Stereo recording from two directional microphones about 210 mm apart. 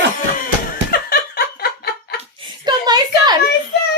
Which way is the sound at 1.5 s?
50° left (ahead or behind).